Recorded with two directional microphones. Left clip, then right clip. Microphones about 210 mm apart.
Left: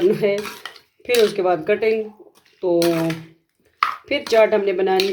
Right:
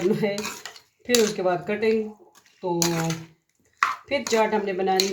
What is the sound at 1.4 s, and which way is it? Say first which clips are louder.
Speech: left 6 dB; 40° left (ahead or behind).